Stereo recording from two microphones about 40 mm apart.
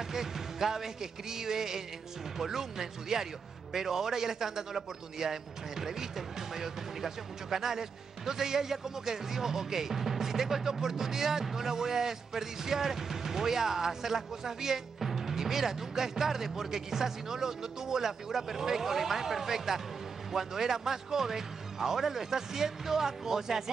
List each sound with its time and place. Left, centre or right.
0.1 s speech: centre